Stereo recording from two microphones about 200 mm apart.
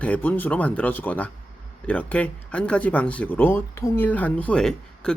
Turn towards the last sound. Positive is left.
turn(degrees=5)  # may be behind; listen again after turning